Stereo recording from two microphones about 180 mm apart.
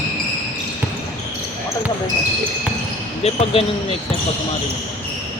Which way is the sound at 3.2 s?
35° left (ahead or behind).